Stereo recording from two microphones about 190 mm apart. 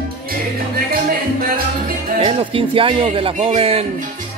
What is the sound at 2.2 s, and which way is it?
Speech, 25° right (ahead or behind).